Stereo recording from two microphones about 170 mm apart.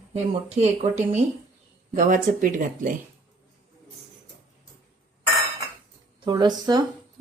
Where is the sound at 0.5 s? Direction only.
40° right (ahead or behind).